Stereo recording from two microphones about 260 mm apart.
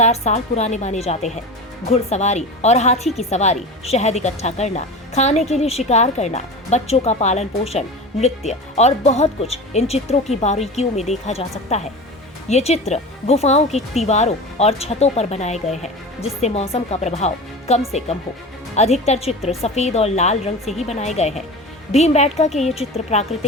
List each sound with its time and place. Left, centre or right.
0.0 s a woman's voice: left